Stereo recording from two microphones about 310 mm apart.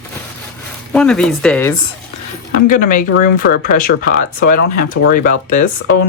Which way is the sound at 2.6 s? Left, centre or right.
Left.